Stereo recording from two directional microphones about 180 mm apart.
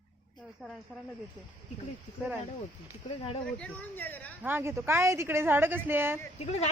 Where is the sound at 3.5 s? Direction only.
5° left (ahead or behind).